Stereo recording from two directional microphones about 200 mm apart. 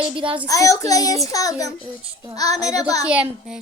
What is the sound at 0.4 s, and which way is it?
A child's voice, 15° left (ahead or behind).